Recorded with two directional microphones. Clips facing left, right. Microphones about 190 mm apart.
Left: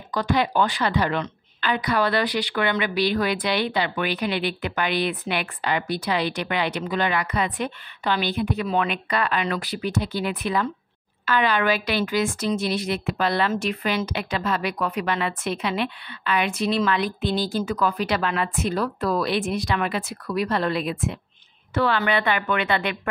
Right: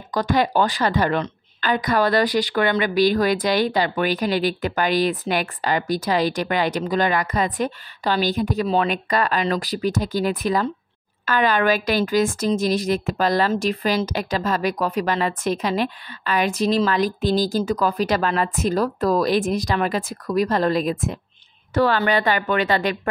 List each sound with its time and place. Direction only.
0.1 s a woman's voice: 45° right (ahead or behind)